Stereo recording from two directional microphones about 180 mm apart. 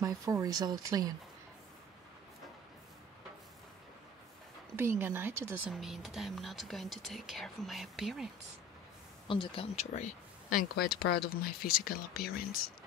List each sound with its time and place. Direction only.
0.0 s speech: 20° right (ahead or behind)
4.7 s speech: 10° right (ahead or behind)
9.3 s speech: 30° left (ahead or behind); by 12.4 s 55° left (ahead or behind)